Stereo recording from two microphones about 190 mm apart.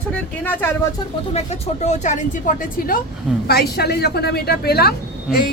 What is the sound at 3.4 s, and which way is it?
Speech, 55° left (ahead or behind).